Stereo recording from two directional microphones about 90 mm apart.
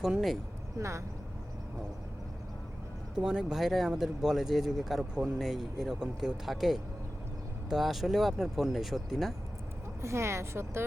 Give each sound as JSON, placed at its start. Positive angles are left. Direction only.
{"t": 0.0, "sound": "speech", "side_deg": -5}
{"t": 0.8, "sound": "a woman's voice", "side_deg": -35}
{"t": 3.2, "sound": "speech", "side_deg": -10}
{"t": 10.0, "sound": "a woman's voice", "side_deg": -30}